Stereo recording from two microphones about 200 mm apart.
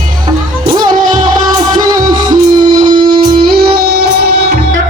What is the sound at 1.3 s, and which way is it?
Music, 40° right (ahead or behind).